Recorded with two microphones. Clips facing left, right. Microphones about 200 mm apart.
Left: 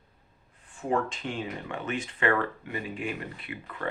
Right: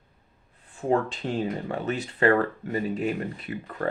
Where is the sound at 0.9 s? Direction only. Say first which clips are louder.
Right 4 dB; 35° right (ahead or behind).